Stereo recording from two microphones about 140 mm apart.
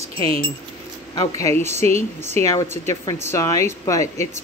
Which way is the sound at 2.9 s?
30° left (ahead or behind).